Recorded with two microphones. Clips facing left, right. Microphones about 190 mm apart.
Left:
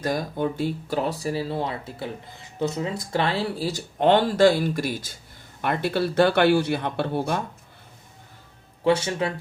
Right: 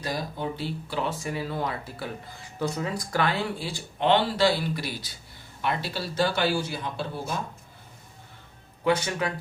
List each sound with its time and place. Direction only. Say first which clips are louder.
0.0 s speech: left 6 dB; 50° left (ahead or behind)
8.8 s speech: left 3 dB; 30° left (ahead or behind)